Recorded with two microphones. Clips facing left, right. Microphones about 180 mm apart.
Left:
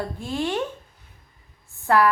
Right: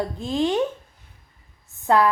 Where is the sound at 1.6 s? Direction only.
20° right (ahead or behind).